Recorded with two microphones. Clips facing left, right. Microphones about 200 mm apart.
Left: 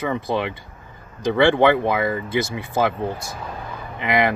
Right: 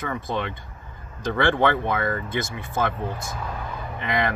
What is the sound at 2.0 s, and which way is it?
Speech, 10° left (ahead or behind).